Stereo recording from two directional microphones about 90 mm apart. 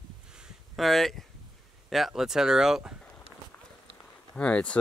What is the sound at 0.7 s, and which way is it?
Speech, centre (ahead or behind).